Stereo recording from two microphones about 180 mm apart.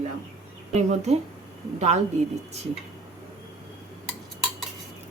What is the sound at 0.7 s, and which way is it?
Speech, 40° right (ahead or behind).